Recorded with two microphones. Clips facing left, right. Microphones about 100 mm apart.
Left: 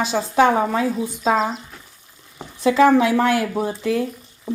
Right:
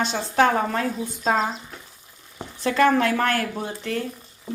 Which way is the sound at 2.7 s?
10° left (ahead or behind).